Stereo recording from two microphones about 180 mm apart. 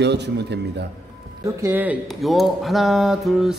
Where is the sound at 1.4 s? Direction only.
10° right (ahead or behind).